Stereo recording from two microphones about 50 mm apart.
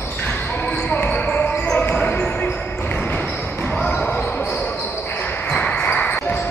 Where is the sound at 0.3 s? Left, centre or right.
Left.